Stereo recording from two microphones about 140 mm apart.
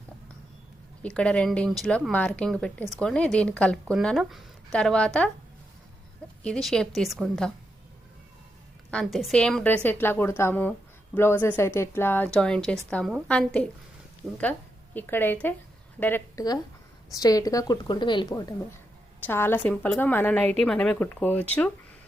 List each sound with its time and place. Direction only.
1.0 s a woman's voice: 5° left (ahead or behind)
6.4 s speech: 5° left (ahead or behind)
8.9 s a woman's voice: 5° left (ahead or behind)
14.9 s a woman's voice: 15° left (ahead or behind)
17.1 s speech: 25° left (ahead or behind)
19.2 s a woman's voice: 15° left (ahead or behind)